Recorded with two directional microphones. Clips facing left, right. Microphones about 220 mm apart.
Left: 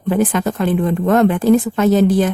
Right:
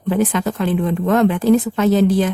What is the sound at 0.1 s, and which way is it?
Speech, 45° left (ahead or behind).